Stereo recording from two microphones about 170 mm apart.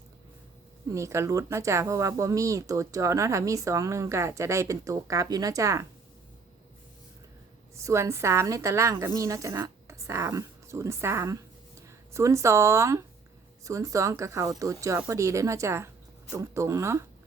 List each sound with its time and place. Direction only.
0.9 s speech: 15° right (ahead or behind)
7.8 s a woman's voice: 20° right (ahead or behind)